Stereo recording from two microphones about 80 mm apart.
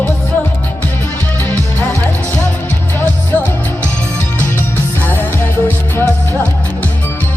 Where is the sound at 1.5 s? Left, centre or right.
Left.